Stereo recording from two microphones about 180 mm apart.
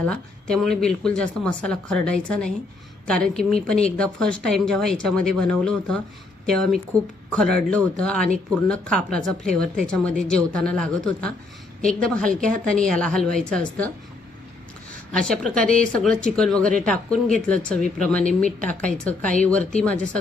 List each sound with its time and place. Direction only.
0.0 s a woman's voice: 5° left (ahead or behind)
15.1 s a woman's voice: 5° left (ahead or behind)
18.7 s a woman's voice: 45° right (ahead or behind)
19.5 s a woman's voice: 5° left (ahead or behind)